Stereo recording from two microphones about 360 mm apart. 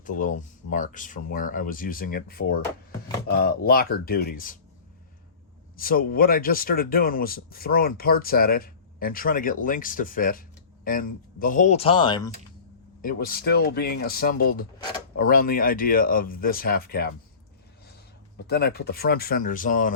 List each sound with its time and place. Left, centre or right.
0.0 s speech: left
5.7 s speech: left
13.0 s speech: left
18.4 s speech: left